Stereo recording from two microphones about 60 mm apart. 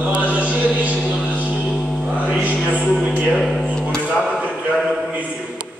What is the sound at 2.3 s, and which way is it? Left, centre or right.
Speech, right.